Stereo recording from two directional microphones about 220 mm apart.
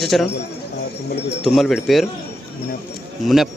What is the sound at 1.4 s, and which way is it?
Speech, centre (ahead or behind).